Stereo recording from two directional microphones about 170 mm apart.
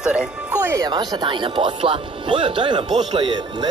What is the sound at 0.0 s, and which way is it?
Music, 5° right (ahead or behind).